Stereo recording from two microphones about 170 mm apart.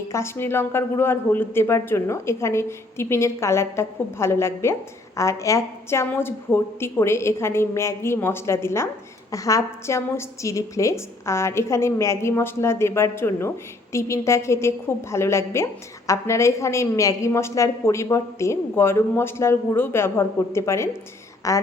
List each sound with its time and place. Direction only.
0.1 s a man's voice: 15° left (ahead or behind)